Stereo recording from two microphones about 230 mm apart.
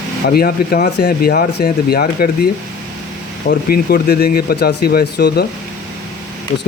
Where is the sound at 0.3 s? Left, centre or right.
Left.